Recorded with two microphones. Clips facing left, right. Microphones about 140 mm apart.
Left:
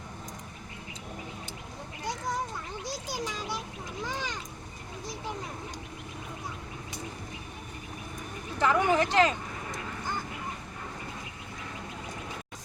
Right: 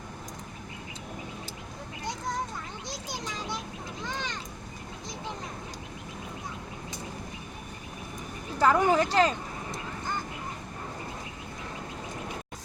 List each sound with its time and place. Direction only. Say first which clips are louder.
2.8 s children playing: left 5 dB; 10° left (ahead or behind)
4.0 s a sound: left 1 dB; 10° left (ahead or behind)
8.5 s speech: right 2 dB; 35° right (ahead or behind)